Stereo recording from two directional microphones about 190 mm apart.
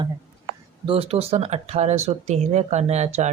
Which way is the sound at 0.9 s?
30° right (ahead or behind).